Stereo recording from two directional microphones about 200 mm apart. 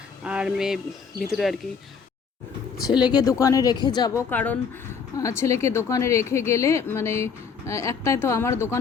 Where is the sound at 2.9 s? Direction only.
20° left (ahead or behind).